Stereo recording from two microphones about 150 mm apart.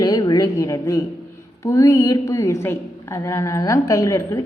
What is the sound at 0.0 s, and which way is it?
A woman's voice, 25° left (ahead or behind).